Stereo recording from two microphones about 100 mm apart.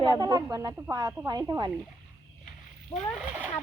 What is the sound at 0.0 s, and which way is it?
Speech, 45° right (ahead or behind).